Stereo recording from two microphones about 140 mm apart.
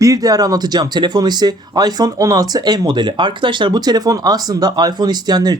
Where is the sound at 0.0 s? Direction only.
25° right (ahead or behind).